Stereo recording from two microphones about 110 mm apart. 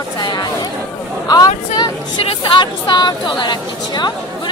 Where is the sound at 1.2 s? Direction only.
35° left (ahead or behind).